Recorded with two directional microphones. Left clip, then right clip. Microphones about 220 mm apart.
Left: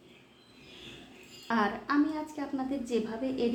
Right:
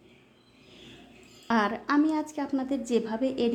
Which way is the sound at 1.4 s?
45° right (ahead or behind).